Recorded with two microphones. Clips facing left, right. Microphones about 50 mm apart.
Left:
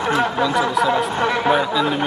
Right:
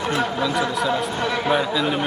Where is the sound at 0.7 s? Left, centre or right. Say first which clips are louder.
Left 4 dB; centre.